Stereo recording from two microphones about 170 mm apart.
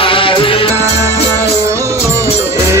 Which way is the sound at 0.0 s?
30° left (ahead or behind).